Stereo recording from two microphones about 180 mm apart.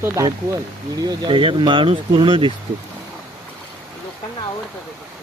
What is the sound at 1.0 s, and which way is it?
Speech, 25° right (ahead or behind).